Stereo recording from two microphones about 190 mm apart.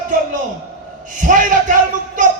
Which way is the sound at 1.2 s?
45° right (ahead or behind).